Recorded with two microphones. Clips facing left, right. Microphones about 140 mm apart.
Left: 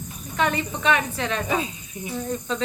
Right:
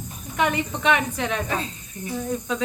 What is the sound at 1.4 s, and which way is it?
Speech, 10° left (ahead or behind).